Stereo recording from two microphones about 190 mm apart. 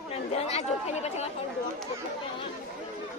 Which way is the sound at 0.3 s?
35° left (ahead or behind).